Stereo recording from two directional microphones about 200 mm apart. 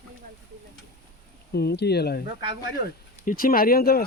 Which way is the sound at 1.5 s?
55° left (ahead or behind).